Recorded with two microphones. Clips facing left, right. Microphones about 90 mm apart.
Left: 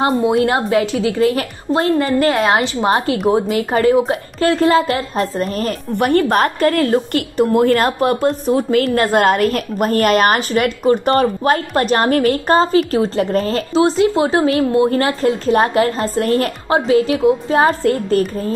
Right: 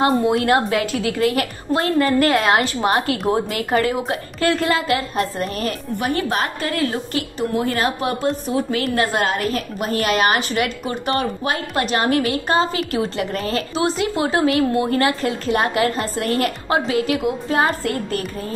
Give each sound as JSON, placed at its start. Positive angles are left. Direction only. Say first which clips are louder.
{"t": 0.0, "sound": "a woman's voice", "louder": "left 3 dB", "side_deg": 30}
{"t": 5.9, "sound": "a woman's voice", "louder": "left 9 dB", "side_deg": 55}